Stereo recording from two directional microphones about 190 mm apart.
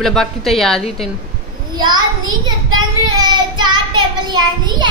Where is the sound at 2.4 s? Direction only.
20° right (ahead or behind).